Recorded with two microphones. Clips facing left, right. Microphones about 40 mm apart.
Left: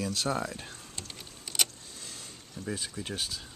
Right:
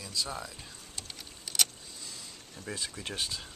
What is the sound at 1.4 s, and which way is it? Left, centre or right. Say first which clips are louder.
Vehicle: even; centre.